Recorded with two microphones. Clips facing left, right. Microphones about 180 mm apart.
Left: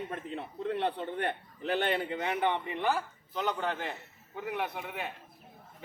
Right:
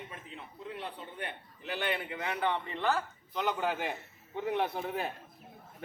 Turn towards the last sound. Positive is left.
turn(degrees=-35)  # may be behind; listen again after turning